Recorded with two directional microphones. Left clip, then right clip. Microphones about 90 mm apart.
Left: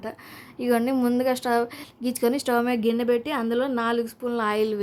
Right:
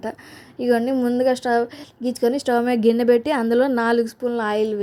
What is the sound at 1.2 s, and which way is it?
A woman's voice, 20° right (ahead or behind).